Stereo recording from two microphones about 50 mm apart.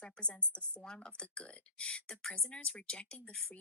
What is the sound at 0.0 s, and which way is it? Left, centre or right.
Speech, left.